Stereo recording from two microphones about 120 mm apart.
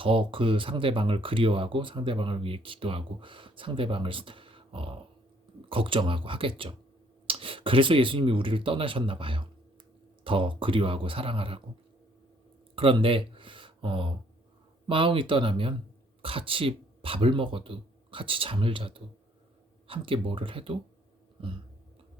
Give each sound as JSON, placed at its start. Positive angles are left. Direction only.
{"t": 0.0, "sound": "speech", "side_deg": -45}
{"t": 12.7, "sound": "a sound", "side_deg": -50}
{"t": 14.8, "sound": "speech", "side_deg": -45}